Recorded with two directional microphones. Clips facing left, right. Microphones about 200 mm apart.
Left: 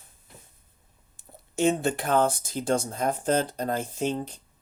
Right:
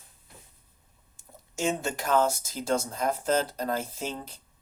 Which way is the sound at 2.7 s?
30° left (ahead or behind).